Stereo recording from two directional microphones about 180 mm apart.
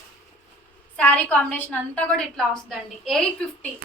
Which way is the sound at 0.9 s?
10° left (ahead or behind).